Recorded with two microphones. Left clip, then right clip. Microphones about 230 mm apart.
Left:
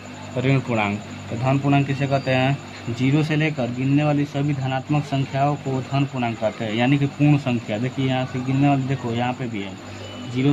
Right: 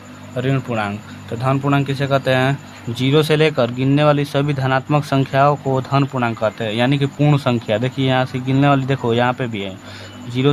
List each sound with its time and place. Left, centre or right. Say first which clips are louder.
0.3 s speech: right 1 dB; centre
1.5 s a man's voice: right 3 dB; right